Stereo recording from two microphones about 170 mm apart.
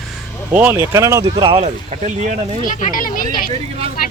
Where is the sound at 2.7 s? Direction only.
50° left (ahead or behind).